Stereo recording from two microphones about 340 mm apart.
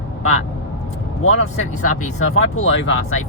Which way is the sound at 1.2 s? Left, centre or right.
Left.